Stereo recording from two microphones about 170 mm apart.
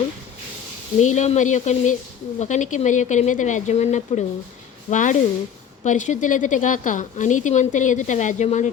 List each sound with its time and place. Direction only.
0.9 s a woman's voice: 40° left (ahead or behind)